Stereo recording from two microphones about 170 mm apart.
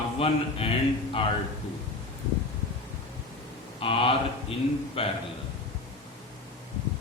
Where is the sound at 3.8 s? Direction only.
35° left (ahead or behind).